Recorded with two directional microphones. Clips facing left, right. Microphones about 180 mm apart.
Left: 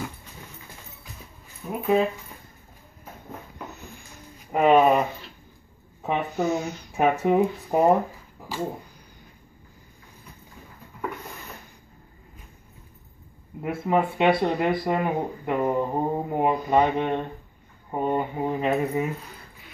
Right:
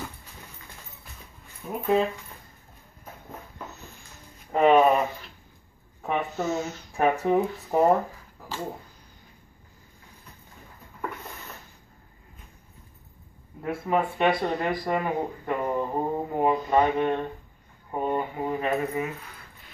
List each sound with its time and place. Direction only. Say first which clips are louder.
1.7 s speech: left 2 dB; 5° left (ahead or behind)
4.5 s speech: left 1 dB; 10° left (ahead or behind)
6.0 s speech: left 2 dB; 15° left (ahead or behind)
13.6 s speech: left 2 dB; 15° left (ahead or behind)